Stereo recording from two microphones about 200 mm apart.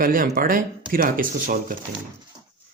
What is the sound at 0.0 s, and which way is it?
Speech, 45° right (ahead or behind).